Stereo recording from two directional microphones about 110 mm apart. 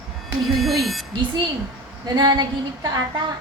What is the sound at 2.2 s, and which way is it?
Speech, 40° right (ahead or behind).